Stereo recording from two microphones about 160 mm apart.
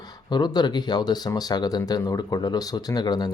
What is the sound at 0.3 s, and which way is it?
Speech, 25° left (ahead or behind).